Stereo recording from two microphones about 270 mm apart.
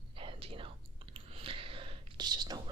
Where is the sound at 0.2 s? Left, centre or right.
Centre.